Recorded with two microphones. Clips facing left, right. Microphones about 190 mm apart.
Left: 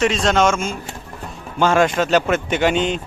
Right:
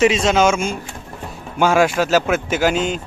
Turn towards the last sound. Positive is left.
turn(degrees=0)  # may be behind; listen again after turning